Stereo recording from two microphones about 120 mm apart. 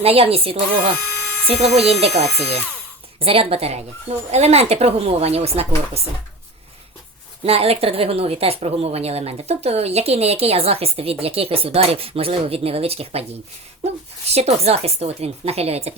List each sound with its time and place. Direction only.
0.0 s speech: 55° right (ahead or behind)
7.4 s speech: 55° right (ahead or behind)